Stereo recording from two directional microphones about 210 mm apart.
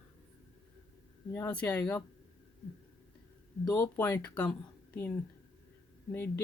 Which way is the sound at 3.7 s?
10° left (ahead or behind).